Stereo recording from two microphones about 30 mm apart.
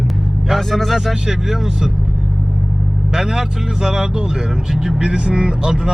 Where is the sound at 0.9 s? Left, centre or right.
Centre.